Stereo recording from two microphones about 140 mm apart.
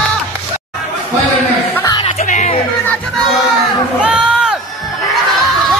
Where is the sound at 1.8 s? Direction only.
25° left (ahead or behind).